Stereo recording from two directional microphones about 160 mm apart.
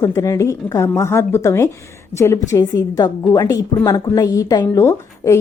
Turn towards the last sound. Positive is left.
turn(degrees=15)  # may be behind; listen again after turning